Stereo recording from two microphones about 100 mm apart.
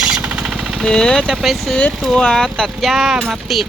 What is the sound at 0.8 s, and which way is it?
Speech, 10° left (ahead or behind).